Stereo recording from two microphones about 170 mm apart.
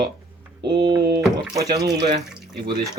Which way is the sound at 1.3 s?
20° right (ahead or behind).